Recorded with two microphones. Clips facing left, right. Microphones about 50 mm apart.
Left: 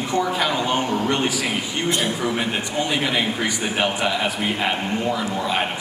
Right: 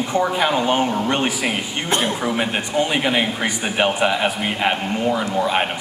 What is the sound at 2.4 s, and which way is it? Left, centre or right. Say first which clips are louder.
A man's voice: right 3 dB; right.